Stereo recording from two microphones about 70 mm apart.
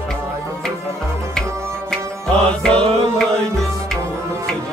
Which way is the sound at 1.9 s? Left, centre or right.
Centre.